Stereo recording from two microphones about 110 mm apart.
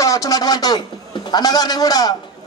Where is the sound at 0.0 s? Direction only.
30° left (ahead or behind).